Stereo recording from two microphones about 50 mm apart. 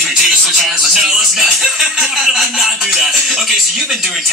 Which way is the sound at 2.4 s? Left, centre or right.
Centre.